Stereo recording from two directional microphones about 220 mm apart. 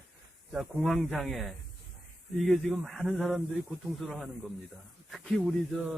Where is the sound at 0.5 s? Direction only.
Centre (ahead or behind).